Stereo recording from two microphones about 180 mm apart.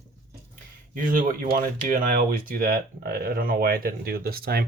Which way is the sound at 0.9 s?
50° right (ahead or behind).